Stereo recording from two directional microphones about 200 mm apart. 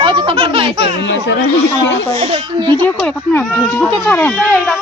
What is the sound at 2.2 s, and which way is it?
Speech, 30° right (ahead or behind).